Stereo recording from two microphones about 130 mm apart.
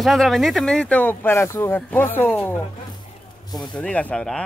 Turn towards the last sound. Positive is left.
turn(degrees=5)  # may be behind; listen again after turning